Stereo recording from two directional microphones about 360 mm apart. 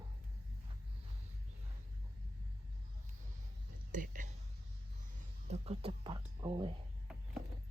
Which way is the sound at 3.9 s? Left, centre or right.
Right.